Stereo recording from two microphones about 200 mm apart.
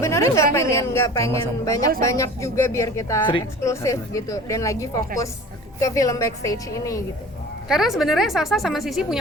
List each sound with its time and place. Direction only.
0.0 s a sound: 15° left (ahead or behind)
0.5 s speech: 15° left (ahead or behind)
7.7 s a woman's voice: centre (ahead or behind)